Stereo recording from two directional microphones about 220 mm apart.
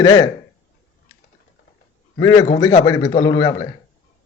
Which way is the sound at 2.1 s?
15° left (ahead or behind).